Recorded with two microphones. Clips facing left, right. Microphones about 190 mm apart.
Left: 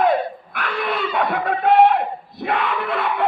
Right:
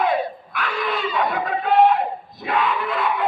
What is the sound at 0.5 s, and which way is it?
Dog, 60° left (ahead or behind).